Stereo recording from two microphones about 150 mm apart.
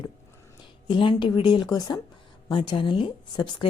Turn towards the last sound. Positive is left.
turn(degrees=30)  # may be behind; listen again after turning